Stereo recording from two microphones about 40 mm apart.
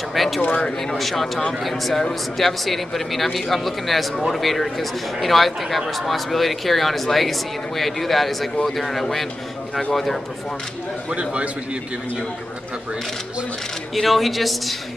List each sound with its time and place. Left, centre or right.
0.1 s speech: centre
11.1 s a man's voice: right
13.9 s speech: centre